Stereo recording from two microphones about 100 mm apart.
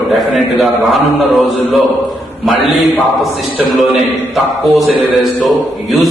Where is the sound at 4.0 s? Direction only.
Centre (ahead or behind).